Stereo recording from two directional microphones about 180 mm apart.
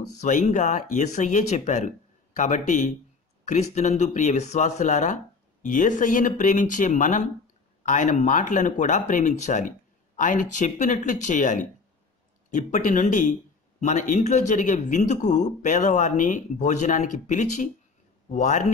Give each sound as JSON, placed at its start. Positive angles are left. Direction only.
{"t": 0.2, "sound": "a man's voice", "side_deg": 45}